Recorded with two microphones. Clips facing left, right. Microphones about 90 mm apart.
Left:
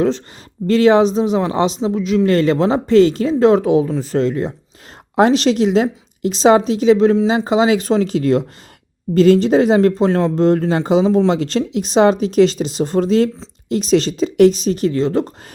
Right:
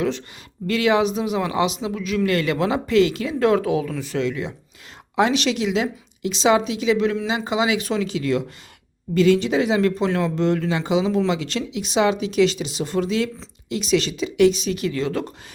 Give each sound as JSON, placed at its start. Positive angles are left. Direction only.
{"t": 0.7, "sound": "speech", "side_deg": 35}